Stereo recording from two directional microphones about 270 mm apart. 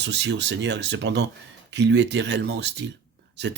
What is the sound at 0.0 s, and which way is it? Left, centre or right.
Speech, right.